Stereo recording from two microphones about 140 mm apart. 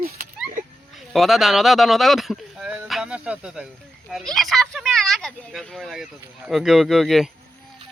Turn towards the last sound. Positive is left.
turn(degrees=0)  # may be behind; listen again after turning